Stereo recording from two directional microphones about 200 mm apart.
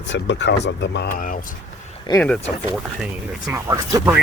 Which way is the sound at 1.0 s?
45° left (ahead or behind).